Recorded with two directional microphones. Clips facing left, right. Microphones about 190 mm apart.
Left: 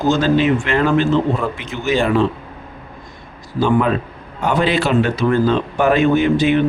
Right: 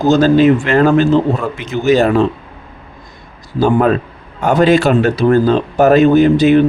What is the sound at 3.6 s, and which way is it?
A man's voice, 40° right (ahead or behind).